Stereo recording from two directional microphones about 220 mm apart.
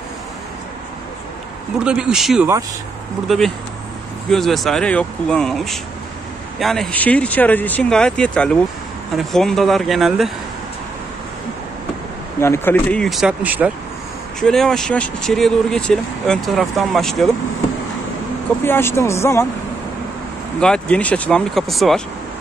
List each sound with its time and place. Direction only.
1.9 s speech: 5° right (ahead or behind)
12.4 s speech: 10° left (ahead or behind)
18.6 s speech: 10° left (ahead or behind)
20.6 s speech: 5° left (ahead or behind)